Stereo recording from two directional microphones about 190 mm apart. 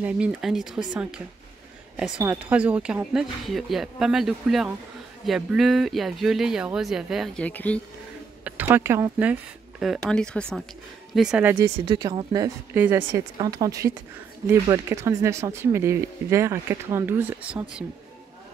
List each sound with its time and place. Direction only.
0.0 s speech: 5° right (ahead or behind)
8.5 s speech: 10° right (ahead or behind)
11.8 s speech: 20° right (ahead or behind)
12.7 s speech: 10° right (ahead or behind)